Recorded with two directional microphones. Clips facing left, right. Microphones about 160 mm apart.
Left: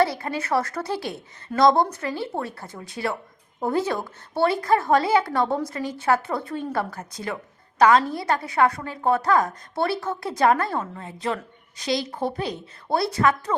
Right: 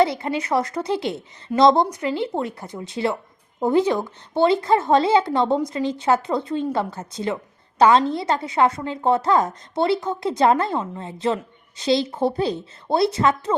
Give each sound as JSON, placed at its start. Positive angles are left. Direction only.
{"t": 0.0, "sound": "a woman's voice", "side_deg": -20}